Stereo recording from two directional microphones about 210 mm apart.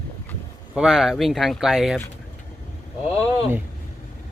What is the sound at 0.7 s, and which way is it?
Speech, centre (ahead or behind).